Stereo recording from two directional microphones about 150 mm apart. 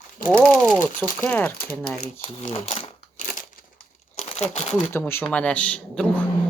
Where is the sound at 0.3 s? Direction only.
5° left (ahead or behind).